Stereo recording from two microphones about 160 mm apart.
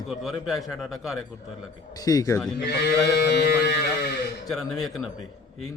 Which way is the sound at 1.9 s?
25° left (ahead or behind).